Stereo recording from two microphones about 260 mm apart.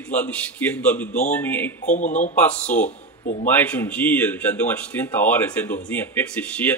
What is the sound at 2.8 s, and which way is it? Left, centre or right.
Speech, left.